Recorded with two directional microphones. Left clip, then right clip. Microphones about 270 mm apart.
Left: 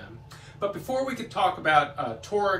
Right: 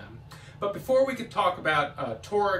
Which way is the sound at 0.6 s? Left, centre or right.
Centre.